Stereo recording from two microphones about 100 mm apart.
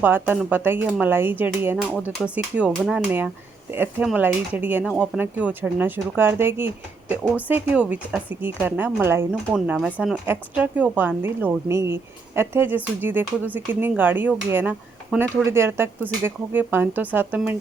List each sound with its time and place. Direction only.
0.0 s speech: 20° right (ahead or behind)
4.2 s speech: 20° right (ahead or behind)
9.5 s speech: 10° right (ahead or behind)